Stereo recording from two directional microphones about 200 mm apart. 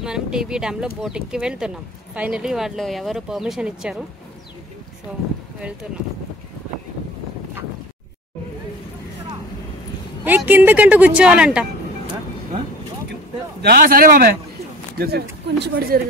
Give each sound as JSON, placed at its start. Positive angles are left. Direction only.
{"t": 0.0, "sound": "speech", "side_deg": -5}
{"t": 10.2, "sound": "speech", "side_deg": -10}
{"t": 13.6, "sound": "a man's voice", "side_deg": -50}